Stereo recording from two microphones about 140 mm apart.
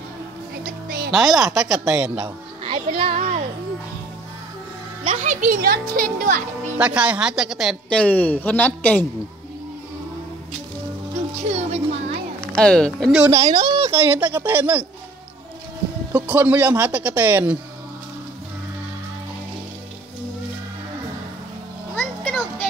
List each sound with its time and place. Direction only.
1.1 s speech: 5° right (ahead or behind)
2.2 s speech: 40° right (ahead or behind)
5.1 s a child's voice: 60° right (ahead or behind)
6.8 s speech: 10° right (ahead or behind); by 9.0 s 10° left (ahead or behind)
11.3 s speech: 50° right (ahead or behind)
12.5 s speech: 5° left (ahead or behind)
13.3 s speech: 30° right (ahead or behind)
13.9 s speech: 15° right (ahead or behind)
16.1 s speech: 15° right (ahead or behind)
21.9 s a sound: 10° left (ahead or behind)